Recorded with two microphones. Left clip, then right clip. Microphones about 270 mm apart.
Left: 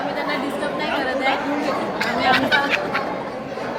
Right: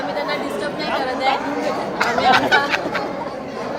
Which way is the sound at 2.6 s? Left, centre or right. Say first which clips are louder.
Even; centre.